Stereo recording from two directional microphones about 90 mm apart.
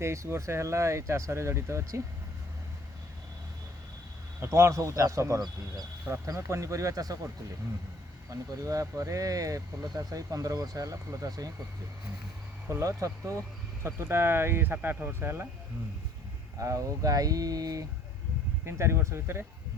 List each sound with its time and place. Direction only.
0.0 s speech: 30° right (ahead or behind)
4.4 s speech: 30° right (ahead or behind)
8.3 s speech: 40° right (ahead or behind)
12.6 s speech: 35° right (ahead or behind)
16.6 s speech: 40° right (ahead or behind)
18.6 s speech: 30° right (ahead or behind)